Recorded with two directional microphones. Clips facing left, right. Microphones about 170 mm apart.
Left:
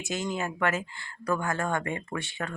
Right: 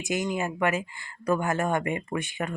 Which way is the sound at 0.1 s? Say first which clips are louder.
Right 3 dB; 15° right (ahead or behind).